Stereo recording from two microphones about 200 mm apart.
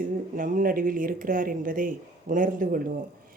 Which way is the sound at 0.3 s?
45° right (ahead or behind).